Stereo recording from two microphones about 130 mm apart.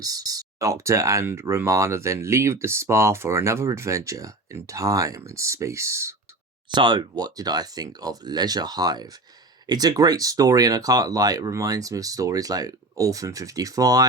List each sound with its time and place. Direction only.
0.0 s speech: 30° right (ahead or behind)
6.7 s speech: 35° right (ahead or behind)